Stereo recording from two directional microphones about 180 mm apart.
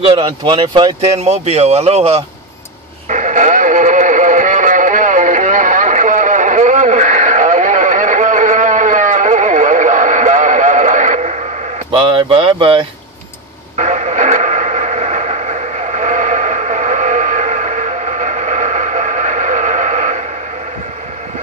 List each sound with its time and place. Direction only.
0.0 s speech: 30° right (ahead or behind)
1.1 s speech: 35° right (ahead or behind)
3.1 s radio: 45° right (ahead or behind)
11.9 s speech: 30° right (ahead or behind)
13.7 s radio: 40° right (ahead or behind)